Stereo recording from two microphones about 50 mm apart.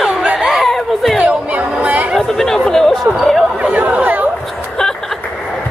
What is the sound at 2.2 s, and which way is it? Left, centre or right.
Chatter, centre.